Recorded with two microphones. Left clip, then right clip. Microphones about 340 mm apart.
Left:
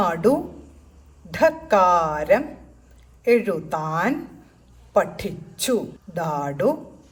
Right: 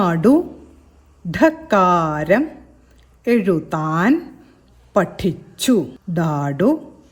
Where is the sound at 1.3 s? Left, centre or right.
Right.